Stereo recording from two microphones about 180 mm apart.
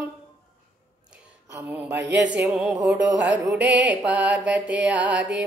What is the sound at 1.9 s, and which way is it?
Speech, 70° right (ahead or behind).